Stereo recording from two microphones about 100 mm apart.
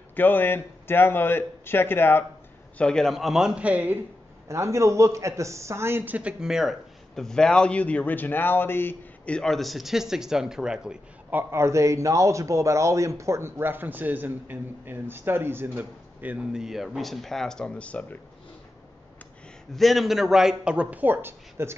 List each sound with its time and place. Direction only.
0.1 s a man's voice: 20° left (ahead or behind)
2.8 s a man's voice: 5° left (ahead or behind); by 4.0 s 15° right (ahead or behind)
4.5 s a man's voice: 30° right (ahead or behind); by 8.9 s 20° left (ahead or behind)
9.2 s a man's voice: 10° left (ahead or behind)
11.2 s a man's voice: 20° right (ahead or behind); by 18.0 s 10° left (ahead or behind)
19.7 s a man's voice: centre (ahead or behind); by 21.7 s 25° right (ahead or behind)